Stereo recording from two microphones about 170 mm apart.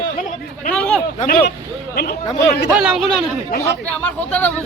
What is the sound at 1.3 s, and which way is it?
Speech, 60° left (ahead or behind).